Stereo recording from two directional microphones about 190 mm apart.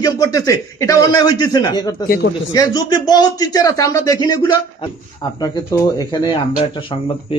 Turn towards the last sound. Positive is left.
turn(degrees=20)  # may be behind; listen again after turning